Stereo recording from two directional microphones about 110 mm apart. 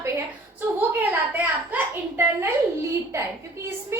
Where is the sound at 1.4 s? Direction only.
15° right (ahead or behind).